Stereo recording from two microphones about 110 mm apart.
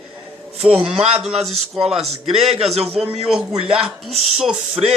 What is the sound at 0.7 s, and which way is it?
Speech, 10° right (ahead or behind).